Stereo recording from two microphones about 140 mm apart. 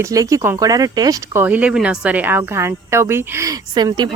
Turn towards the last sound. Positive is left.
turn(degrees=-30)  # may be behind; listen again after turning